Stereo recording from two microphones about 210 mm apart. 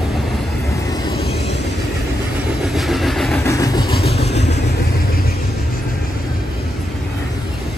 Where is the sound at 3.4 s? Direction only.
15° left (ahead or behind).